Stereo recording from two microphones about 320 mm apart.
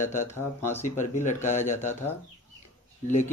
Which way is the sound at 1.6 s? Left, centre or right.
Centre.